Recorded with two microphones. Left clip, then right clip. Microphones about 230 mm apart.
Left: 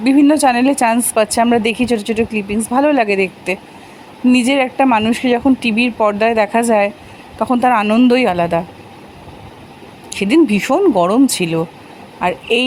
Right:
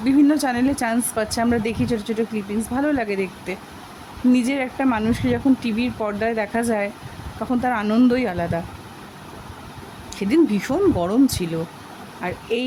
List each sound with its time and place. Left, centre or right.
0.0 s a woman's voice: centre
10.2 s a woman's voice: centre